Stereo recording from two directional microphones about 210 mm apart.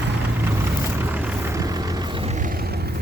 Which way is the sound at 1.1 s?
10° right (ahead or behind).